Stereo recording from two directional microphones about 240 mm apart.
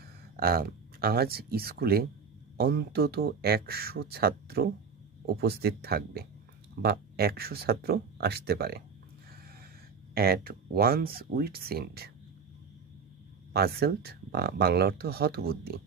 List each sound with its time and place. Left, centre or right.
0.0 s speech: right
10.1 s speech: right
13.5 s speech: right